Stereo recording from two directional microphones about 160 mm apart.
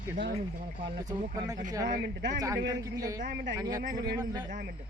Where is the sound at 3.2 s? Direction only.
90° right.